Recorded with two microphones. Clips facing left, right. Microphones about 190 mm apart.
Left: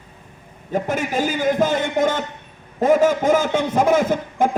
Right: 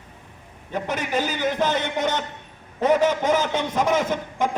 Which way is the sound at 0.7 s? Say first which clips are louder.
Left 4 dB; 50° left (ahead or behind).